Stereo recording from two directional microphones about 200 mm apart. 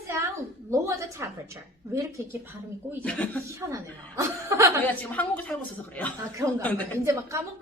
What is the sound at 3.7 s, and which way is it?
A woman's voice, 15° right (ahead or behind).